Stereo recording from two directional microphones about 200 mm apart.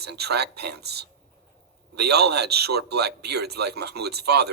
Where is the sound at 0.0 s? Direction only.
55° right (ahead or behind).